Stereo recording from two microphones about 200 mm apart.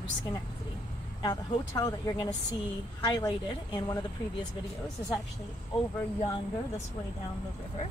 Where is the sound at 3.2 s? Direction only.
20° left (ahead or behind).